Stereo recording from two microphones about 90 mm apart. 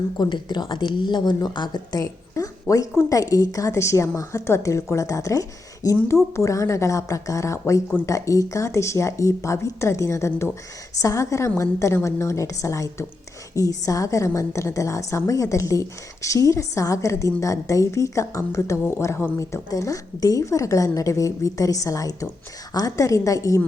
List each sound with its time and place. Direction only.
0.2 s speech: 55° left (ahead or behind); by 23.6 s 40° left (ahead or behind)